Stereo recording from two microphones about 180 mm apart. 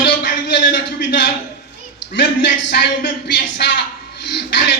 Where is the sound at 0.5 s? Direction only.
75° left (ahead or behind).